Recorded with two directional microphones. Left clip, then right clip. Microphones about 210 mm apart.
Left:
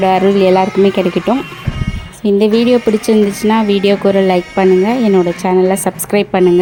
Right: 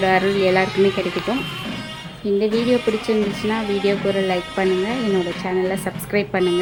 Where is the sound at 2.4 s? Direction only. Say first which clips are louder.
Left 8 dB; 40° left (ahead or behind).